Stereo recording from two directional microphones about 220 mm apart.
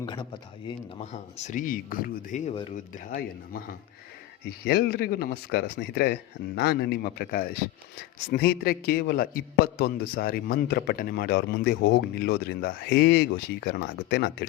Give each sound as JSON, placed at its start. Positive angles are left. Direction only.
{"t": 0.0, "sound": "a man's voice", "side_deg": 20}